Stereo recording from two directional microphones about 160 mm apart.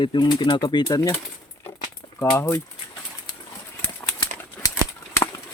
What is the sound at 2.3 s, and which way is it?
Speech, 15° left (ahead or behind).